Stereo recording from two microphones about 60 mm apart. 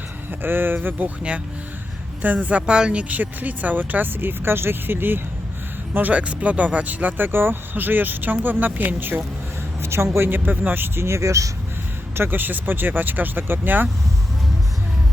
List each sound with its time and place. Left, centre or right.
0.3 s speech: right
2.2 s speech: right
9.8 s speech: right
11.0 s speech: right
12.1 s speech: right